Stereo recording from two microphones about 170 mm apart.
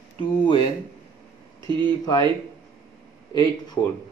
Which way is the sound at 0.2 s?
30° left (ahead or behind).